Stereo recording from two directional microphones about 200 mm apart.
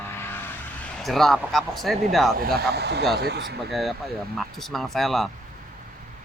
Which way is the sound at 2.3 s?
50° right (ahead or behind).